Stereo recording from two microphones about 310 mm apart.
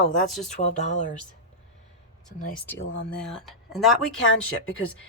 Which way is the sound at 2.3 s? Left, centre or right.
Left.